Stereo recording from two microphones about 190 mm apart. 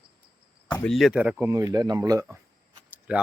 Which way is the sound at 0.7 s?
Centre (ahead or behind).